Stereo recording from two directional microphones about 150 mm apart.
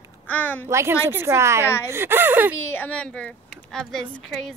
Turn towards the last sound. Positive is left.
turn(degrees=0)  # may be behind; listen again after turning